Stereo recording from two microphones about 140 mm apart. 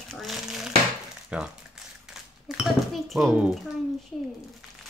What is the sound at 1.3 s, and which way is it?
Speech, 10° right (ahead or behind).